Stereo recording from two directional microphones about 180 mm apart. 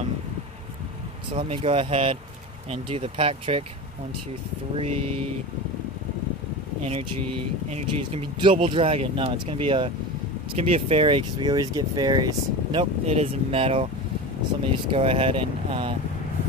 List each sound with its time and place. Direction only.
1.3 s speech: 30° right (ahead or behind)
4.7 s speech: 30° right (ahead or behind)
7.7 s speech: 35° right (ahead or behind)
13.0 s speech: 35° right (ahead or behind)
14.9 s speech: 35° right (ahead or behind)